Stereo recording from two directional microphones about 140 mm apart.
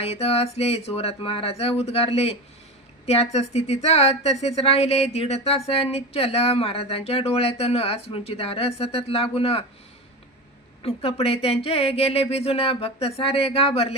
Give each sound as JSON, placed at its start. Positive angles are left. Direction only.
{"t": 0.0, "sound": "speech", "side_deg": 45}
{"t": 10.8, "sound": "speech", "side_deg": 45}